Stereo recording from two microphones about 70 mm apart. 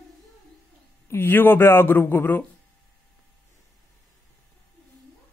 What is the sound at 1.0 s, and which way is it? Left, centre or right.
A man's voice, left.